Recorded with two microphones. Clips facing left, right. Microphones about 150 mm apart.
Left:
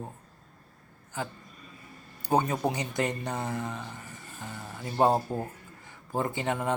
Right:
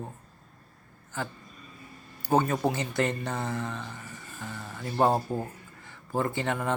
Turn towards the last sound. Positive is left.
turn(degrees=20)  # may be behind; listen again after turning